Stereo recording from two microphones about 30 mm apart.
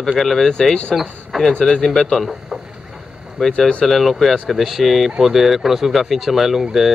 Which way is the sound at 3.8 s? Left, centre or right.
Centre.